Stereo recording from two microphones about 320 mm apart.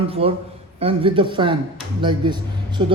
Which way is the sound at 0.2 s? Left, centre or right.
Centre.